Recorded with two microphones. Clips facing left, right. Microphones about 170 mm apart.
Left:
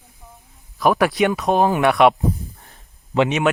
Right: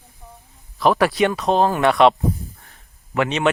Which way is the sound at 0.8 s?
10° left (ahead or behind).